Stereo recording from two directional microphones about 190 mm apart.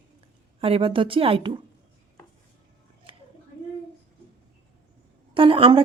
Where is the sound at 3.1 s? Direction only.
30° right (ahead or behind).